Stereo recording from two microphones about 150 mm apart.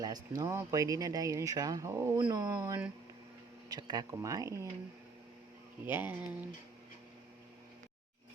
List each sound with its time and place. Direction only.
0.0 s speech: 25° right (ahead or behind)
5.8 s speech: 10° right (ahead or behind)